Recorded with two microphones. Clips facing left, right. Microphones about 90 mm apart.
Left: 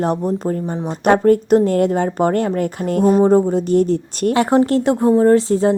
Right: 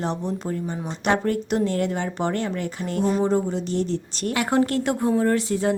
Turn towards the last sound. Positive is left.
turn(degrees=30)  # may be behind; listen again after turning